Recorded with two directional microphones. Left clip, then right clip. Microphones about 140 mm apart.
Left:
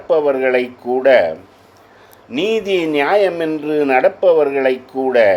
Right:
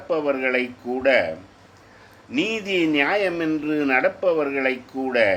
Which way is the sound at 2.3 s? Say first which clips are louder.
Left 7 dB; 35° left (ahead or behind).